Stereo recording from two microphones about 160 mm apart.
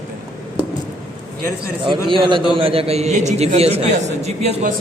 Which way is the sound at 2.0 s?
30° right (ahead or behind).